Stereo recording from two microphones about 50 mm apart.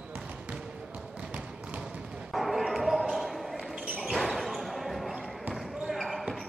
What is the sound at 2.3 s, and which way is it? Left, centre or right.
Basketball bounce, centre.